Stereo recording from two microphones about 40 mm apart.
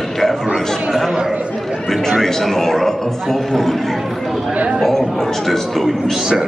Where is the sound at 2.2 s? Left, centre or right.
Centre.